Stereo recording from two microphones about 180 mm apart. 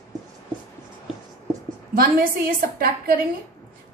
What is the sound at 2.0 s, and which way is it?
A woman's voice, 55° right (ahead or behind).